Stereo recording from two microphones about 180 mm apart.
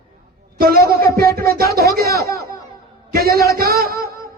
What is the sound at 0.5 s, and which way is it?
A man's voice, 55° right (ahead or behind).